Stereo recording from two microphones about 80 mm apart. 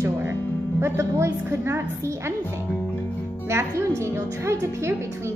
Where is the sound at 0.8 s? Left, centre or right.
Right.